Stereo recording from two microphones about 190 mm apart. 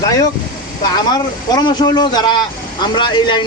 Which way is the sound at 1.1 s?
25° left (ahead or behind).